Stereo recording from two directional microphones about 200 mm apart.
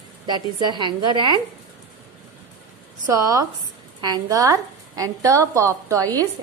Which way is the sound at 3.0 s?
15° right (ahead or behind).